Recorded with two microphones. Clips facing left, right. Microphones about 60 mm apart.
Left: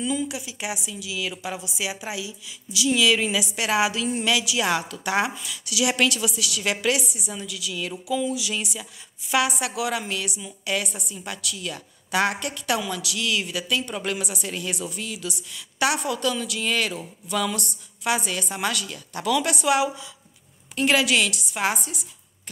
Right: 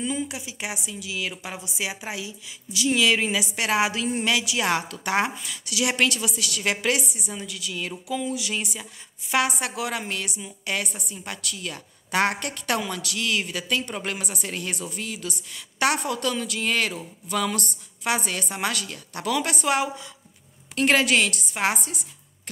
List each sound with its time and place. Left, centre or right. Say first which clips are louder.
0.0 s a woman's voice: left 2 dB; right